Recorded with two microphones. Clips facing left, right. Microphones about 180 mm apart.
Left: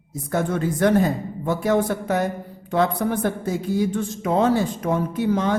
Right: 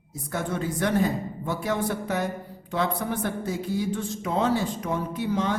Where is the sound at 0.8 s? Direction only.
50° left (ahead or behind).